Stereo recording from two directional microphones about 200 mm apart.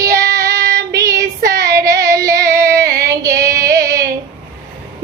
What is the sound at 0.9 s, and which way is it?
Child singing, 15° right (ahead or behind).